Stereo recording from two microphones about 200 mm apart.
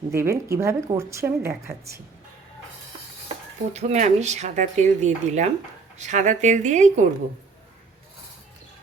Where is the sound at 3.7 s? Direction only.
35° right (ahead or behind).